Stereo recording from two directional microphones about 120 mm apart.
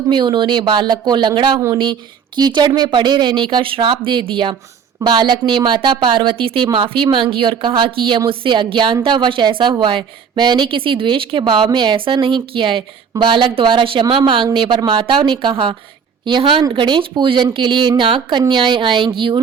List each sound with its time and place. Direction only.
0.1 s speech: 40° right (ahead or behind)
1.8 s speech: 40° right (ahead or behind)